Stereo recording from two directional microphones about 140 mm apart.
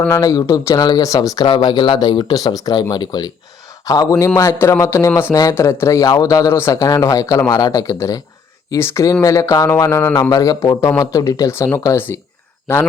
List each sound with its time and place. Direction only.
0.1 s a man's voice: 25° left (ahead or behind)
1.5 s a man's voice: 35° left (ahead or behind); by 12.9 s 20° left (ahead or behind)